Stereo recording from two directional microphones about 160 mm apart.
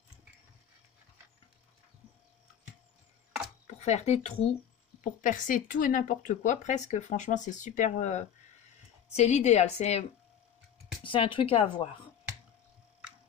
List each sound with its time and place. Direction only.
3.8 s speech: 40° left (ahead or behind)
5.0 s speech: 55° left (ahead or behind)
11.1 s speech: 30° left (ahead or behind)